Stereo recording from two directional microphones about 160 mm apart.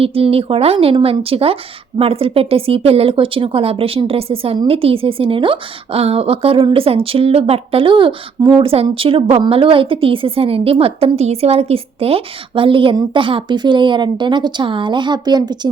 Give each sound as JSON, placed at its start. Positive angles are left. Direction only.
{"t": 0.0, "sound": "a woman's voice", "side_deg": -35}